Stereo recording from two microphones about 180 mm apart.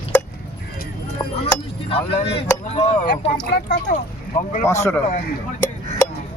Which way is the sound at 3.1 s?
65° left (ahead or behind).